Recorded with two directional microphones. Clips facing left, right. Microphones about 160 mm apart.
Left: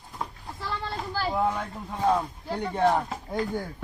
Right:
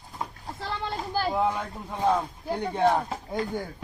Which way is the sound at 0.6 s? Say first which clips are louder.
Right 1 dB; 15° right (ahead or behind).